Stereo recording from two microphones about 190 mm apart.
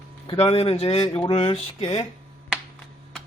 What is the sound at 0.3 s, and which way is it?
Speech, 30° left (ahead or behind).